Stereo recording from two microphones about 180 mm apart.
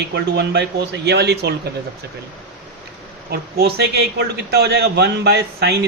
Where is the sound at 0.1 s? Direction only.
70° right (ahead or behind).